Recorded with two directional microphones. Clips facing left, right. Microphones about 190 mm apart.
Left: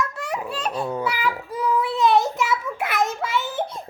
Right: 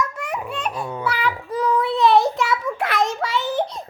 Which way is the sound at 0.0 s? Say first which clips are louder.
Right 1 dB; 30° left (ahead or behind).